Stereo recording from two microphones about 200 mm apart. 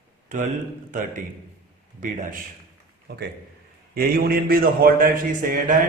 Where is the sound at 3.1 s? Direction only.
55° right (ahead or behind).